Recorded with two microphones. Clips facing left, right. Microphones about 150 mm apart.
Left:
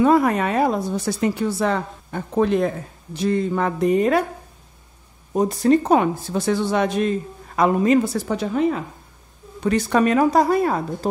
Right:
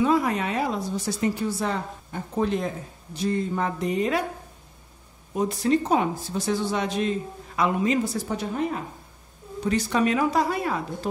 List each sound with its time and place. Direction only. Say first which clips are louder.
0.0 s a woman's voice: left 6 dB; 55° left (ahead or behind)
5.3 s a woman's voice: left 6 dB; 45° left (ahead or behind); by 8.6 s 90° left
9.6 s a woman's voice: left 5 dB; 60° left (ahead or behind); by 11.1 s 40° left (ahead or behind)